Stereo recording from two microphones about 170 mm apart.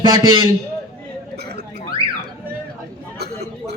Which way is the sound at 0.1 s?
20° right (ahead or behind).